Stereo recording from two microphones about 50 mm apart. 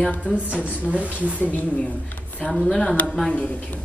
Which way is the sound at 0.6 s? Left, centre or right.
Right.